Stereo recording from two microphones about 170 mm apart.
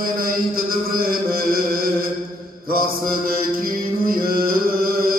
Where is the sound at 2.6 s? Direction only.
60° right (ahead or behind).